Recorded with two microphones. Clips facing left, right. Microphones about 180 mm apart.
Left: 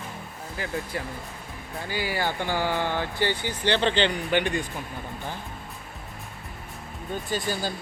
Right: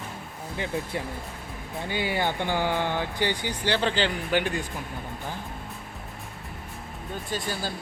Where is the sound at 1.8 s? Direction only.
20° right (ahead or behind); by 4.5 s 5° right (ahead or behind).